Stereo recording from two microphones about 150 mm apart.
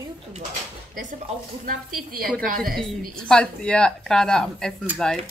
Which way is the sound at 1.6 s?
65° right (ahead or behind).